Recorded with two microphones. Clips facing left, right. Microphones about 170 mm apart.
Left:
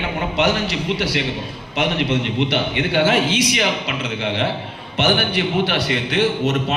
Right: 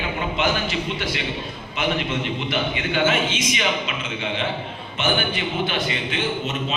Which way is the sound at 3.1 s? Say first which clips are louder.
Left 2 dB; 35° left (ahead or behind).